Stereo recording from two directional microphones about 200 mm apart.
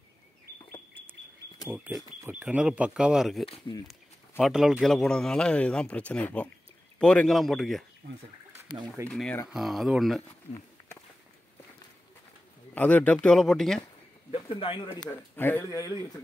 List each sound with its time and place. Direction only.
1.9 s speech: 10° right (ahead or behind)
3.4 s speech: 25° left (ahead or behind)
4.4 s speech: centre (ahead or behind)
8.0 s speech: 45° right (ahead or behind)
9.0 s speech: 5° left (ahead or behind)
12.7 s speech: 5° left (ahead or behind)
14.3 s a man's voice: 25° left (ahead or behind)
15.3 s speech: 10° left (ahead or behind)